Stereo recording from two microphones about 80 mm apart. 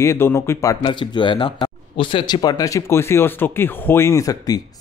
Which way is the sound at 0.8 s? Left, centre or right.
Left.